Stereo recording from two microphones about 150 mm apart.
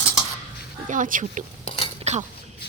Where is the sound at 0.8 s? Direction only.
60° right (ahead or behind).